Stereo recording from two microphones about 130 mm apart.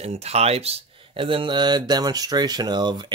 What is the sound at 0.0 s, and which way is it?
Speech, 55° right (ahead or behind).